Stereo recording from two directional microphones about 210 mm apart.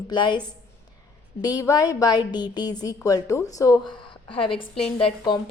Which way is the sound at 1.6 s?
15° left (ahead or behind).